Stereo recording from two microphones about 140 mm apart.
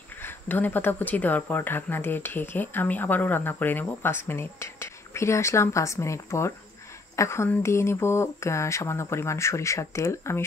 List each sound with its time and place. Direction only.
0.2 s speech: 15° left (ahead or behind)